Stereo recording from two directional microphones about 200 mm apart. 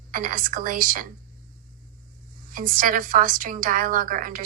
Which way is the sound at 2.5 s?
45° right (ahead or behind).